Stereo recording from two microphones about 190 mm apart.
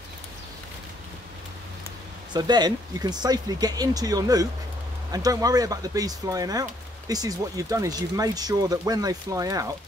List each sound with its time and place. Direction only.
2.3 s speech: 20° right (ahead or behind)